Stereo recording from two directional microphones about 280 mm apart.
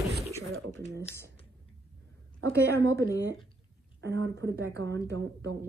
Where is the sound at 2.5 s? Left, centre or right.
Centre.